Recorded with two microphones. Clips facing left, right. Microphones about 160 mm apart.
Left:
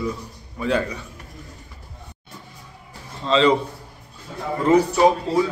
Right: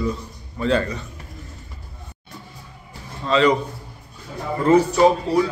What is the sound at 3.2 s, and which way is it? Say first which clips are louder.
Speech: even; 25° left (ahead or behind).